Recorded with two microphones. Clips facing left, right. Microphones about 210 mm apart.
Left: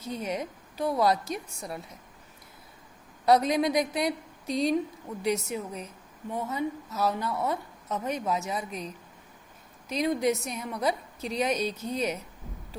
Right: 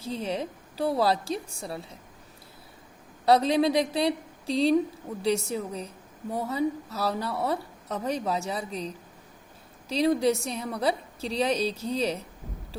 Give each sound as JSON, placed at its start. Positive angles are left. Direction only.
{"t": 0.0, "sound": "a woman's voice", "side_deg": -30}
{"t": 3.2, "sound": "a woman's voice", "side_deg": -30}